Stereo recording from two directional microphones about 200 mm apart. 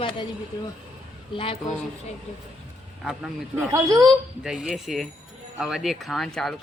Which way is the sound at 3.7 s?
15° right (ahead or behind).